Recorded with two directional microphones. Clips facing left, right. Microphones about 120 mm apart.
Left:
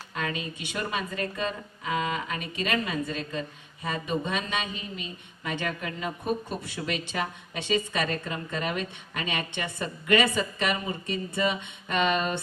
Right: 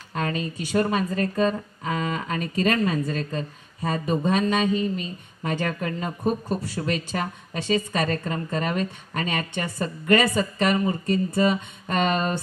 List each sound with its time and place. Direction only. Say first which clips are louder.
0.1 s speech: right 5 dB; 40° right (ahead or behind)